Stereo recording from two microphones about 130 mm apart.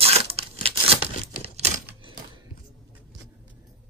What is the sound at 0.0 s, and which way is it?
Tearing, 50° right (ahead or behind).